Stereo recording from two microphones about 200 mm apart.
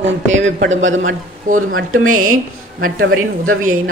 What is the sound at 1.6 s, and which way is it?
Speech, 90° right.